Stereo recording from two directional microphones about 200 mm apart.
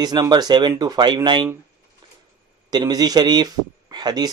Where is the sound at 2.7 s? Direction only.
20° right (ahead or behind).